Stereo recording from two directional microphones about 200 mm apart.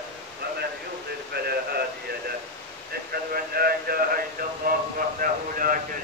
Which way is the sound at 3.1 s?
50° right (ahead or behind).